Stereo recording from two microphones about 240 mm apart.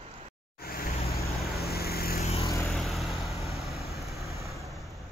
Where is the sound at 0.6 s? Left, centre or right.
Left.